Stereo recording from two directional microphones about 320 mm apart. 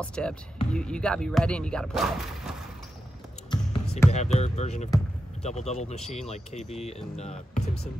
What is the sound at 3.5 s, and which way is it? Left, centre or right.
Speech, centre.